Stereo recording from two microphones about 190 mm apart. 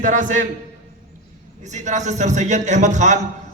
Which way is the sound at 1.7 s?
40° right (ahead or behind).